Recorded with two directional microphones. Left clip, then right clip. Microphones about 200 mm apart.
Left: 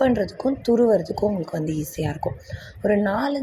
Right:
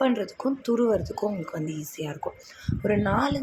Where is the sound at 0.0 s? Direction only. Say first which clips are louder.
Left 5 dB; 15° left (ahead or behind).